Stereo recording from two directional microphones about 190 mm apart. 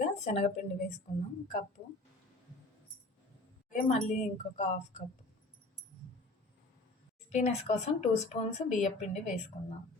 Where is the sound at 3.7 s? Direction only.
40° left (ahead or behind).